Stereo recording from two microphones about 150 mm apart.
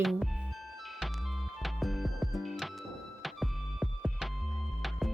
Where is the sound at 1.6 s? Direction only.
Centre (ahead or behind).